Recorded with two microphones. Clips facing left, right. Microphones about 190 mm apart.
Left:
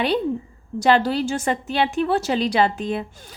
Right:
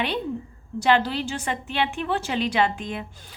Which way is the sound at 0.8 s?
40° left (ahead or behind).